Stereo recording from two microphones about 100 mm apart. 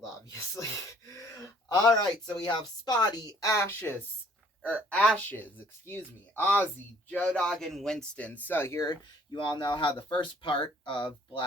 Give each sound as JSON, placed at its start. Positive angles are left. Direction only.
{"t": 0.0, "sound": "a sound", "side_deg": 35}
{"t": 2.0, "sound": "a woman's voice", "side_deg": 40}
{"t": 4.6, "sound": "speech", "side_deg": 15}
{"t": 9.3, "sound": "speech", "side_deg": 50}